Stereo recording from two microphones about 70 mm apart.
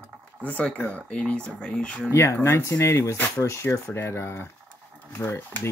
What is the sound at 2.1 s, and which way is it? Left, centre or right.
Speech, left.